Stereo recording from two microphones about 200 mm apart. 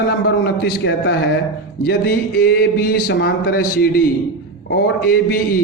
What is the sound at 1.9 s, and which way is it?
A man's voice, 50° left (ahead or behind).